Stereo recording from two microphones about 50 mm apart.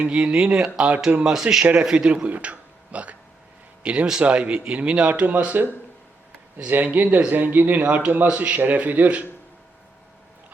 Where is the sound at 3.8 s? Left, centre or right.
Centre.